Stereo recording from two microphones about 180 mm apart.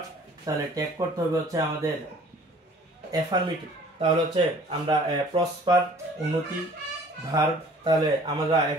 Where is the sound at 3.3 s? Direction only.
20° right (ahead or behind).